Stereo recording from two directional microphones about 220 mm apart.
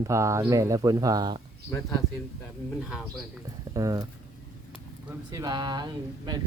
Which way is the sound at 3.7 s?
15° right (ahead or behind).